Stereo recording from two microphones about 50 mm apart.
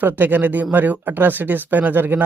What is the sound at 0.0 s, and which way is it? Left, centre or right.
Speech, right.